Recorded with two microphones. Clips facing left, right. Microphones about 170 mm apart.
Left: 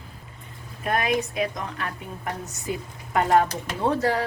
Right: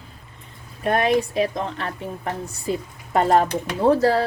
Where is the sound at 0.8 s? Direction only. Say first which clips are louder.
Right 5 dB; 35° right (ahead or behind).